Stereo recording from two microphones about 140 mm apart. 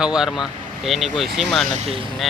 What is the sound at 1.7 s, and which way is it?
Speech, 50° right (ahead or behind).